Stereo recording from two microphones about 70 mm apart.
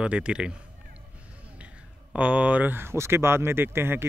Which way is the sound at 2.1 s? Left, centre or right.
Centre.